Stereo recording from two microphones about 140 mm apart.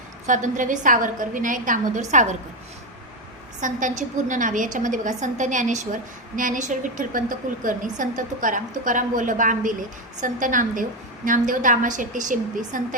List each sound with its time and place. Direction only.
0.3 s a woman's voice: 65° right (ahead or behind)
3.6 s a woman's voice: 65° right (ahead or behind)